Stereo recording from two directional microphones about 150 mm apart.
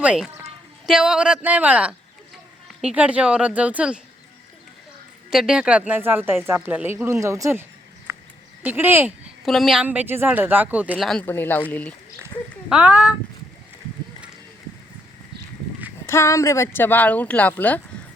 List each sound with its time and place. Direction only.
0.0 s speech: 5° right (ahead or behind)
5.3 s speech: 5° right (ahead or behind)
8.1 s a sound: 15° right (ahead or behind)
8.6 s speech: 15° right (ahead or behind)
9.4 s a woman's voice: centre (ahead or behind)
9.8 s speech: 10° right (ahead or behind)
10.9 s speech: 5° left (ahead or behind)
12.6 s speech: 10° right (ahead or behind)
16.0 s speech: 20° left (ahead or behind)